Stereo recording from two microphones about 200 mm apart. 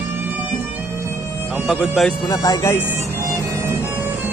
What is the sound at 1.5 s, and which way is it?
Speech, centre (ahead or behind).